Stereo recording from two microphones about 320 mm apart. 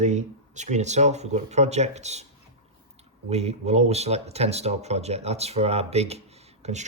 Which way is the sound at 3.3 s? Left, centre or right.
Centre.